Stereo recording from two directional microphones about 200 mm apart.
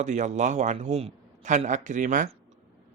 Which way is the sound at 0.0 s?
35° right (ahead or behind).